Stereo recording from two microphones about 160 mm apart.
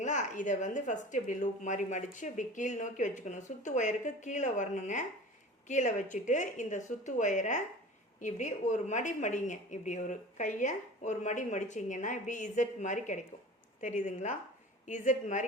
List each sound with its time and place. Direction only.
0.0 s a woman's voice: 50° left (ahead or behind)